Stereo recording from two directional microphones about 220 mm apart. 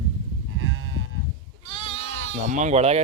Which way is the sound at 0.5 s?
65° right (ahead or behind).